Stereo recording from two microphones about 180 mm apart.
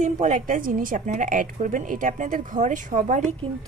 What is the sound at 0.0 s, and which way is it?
A woman's voice, 40° right (ahead or behind).